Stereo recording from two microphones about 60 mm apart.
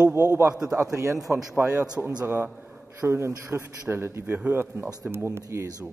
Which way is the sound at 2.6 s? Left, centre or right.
Right.